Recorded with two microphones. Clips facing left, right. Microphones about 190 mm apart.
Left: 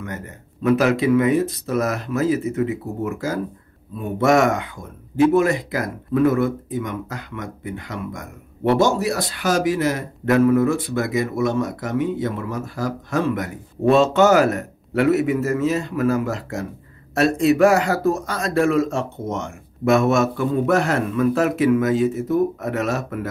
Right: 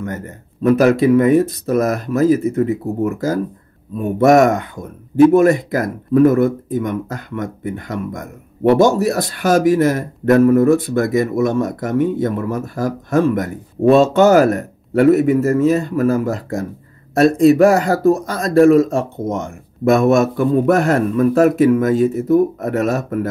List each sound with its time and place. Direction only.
0.0 s a man's voice: 45° right (ahead or behind)